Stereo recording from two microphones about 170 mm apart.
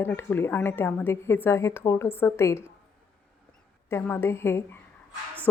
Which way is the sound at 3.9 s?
15° left (ahead or behind).